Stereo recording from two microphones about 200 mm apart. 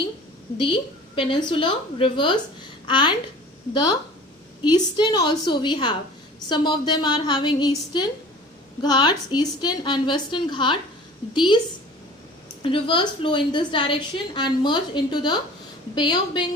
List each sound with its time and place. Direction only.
0.6 s a woman's voice: 25° left (ahead or behind)
4.6 s a woman's voice: 20° left (ahead or behind)
12.6 s a woman's voice: 25° left (ahead or behind)